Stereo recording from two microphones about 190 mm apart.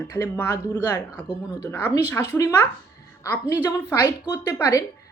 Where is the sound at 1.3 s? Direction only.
5° right (ahead or behind).